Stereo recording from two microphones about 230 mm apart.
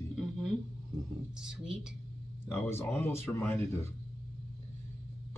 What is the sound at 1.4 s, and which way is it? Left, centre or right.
Speech, centre.